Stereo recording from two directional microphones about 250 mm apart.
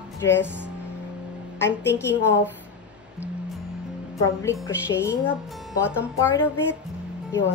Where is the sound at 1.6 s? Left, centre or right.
Centre.